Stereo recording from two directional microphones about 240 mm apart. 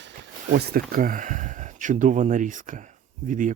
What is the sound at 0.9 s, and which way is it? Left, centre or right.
Speech, right.